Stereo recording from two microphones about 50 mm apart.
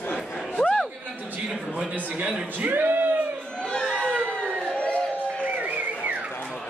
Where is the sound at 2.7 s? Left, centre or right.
Right.